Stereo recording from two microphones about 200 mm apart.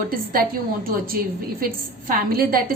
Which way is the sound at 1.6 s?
50° right (ahead or behind).